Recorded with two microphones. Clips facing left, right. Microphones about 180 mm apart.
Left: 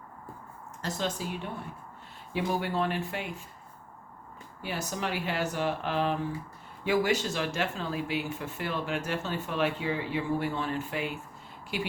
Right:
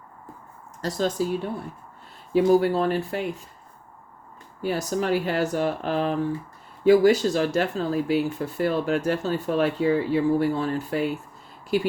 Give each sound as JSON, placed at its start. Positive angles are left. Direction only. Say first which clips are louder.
{"t": 0.8, "sound": "speech", "louder": "right 8 dB", "side_deg": -40}
{"t": 4.6, "sound": "speech", "louder": "right 9 dB", "side_deg": -40}